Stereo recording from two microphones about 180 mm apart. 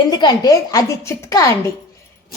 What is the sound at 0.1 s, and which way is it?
Speech, 20° left (ahead or behind).